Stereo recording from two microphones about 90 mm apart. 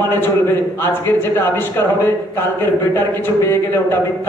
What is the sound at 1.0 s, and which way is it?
Speech, 25° left (ahead or behind).